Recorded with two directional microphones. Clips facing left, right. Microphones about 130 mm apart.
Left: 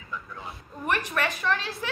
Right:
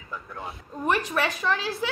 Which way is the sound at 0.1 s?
45° right (ahead or behind).